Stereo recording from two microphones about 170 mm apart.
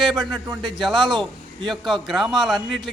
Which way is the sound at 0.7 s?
Centre (ahead or behind).